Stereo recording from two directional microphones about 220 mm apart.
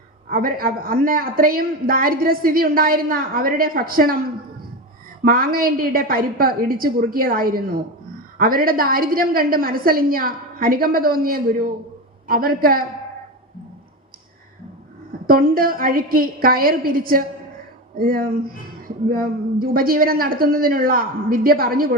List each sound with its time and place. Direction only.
0.3 s a man's voice: 40° right (ahead or behind)
5.2 s a man's voice: 40° right (ahead or behind)
15.3 s a man's voice: 40° right (ahead or behind)